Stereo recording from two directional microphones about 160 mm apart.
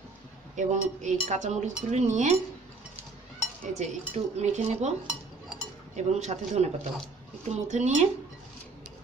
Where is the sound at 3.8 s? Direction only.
45° right (ahead or behind).